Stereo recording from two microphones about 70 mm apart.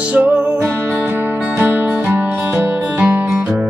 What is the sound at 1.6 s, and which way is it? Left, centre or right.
Music, right.